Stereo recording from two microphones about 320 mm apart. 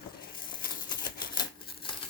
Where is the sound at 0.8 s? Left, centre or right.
Centre.